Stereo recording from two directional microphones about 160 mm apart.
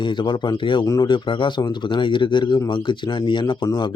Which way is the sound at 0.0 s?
30° left (ahead or behind).